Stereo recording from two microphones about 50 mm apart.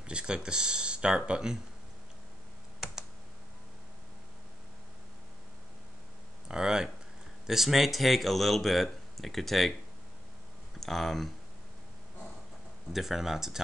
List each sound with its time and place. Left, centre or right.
0.0 s speech: centre
6.5 s speech: centre
10.8 s speech: centre
12.9 s speech: centre